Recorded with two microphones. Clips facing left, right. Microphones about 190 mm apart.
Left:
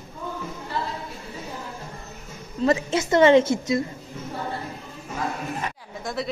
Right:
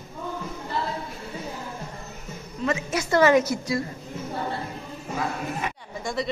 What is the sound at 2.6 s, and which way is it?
A woman's voice, 30° left (ahead or behind).